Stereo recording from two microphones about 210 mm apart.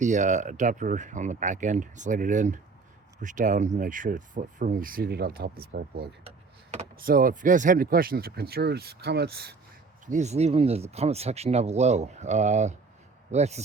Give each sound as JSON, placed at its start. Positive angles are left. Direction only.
{"t": 0.0, "sound": "speech", "side_deg": -35}
{"t": 10.1, "sound": "speech", "side_deg": -35}